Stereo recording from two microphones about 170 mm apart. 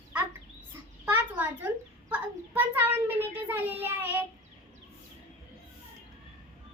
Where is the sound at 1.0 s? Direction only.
10° right (ahead or behind).